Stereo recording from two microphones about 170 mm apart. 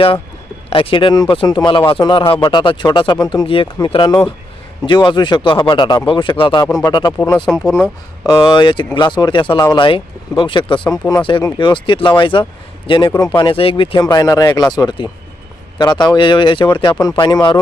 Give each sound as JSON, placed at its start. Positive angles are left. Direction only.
{"t": 0.7, "sound": "speech", "side_deg": 30}
{"t": 7.4, "sound": "speech", "side_deg": 5}
{"t": 8.3, "sound": "speech", "side_deg": 25}